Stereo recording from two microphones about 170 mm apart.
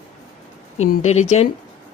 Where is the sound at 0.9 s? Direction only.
40° left (ahead or behind).